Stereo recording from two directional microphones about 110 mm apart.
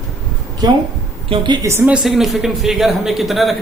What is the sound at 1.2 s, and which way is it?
Speech, 45° right (ahead or behind).